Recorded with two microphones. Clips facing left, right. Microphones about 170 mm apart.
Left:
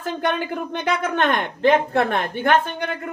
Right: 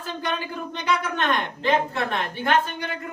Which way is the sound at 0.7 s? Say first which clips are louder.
Left 1 dB; 55° left (ahead or behind).